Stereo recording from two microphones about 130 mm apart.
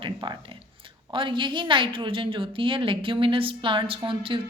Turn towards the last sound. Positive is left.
turn(degrees=-40)  # may be behind; listen again after turning